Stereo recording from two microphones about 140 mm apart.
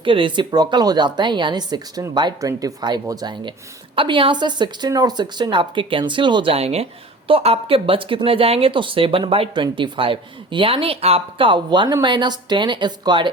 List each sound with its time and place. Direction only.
0.0 s speech: 40° right (ahead or behind)